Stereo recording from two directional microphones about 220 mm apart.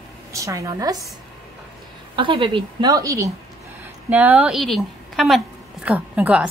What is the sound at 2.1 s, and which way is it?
A woman's voice, 25° right (ahead or behind).